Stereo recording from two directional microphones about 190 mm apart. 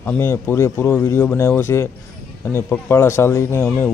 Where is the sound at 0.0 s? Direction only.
10° left (ahead or behind).